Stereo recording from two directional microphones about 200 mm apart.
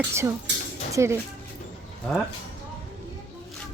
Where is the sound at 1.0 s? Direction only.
15° right (ahead or behind).